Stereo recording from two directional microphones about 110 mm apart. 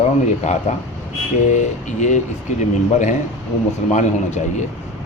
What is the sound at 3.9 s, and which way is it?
Speech, 90° left.